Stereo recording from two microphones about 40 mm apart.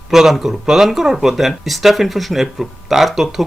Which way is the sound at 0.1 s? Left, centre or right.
Centre.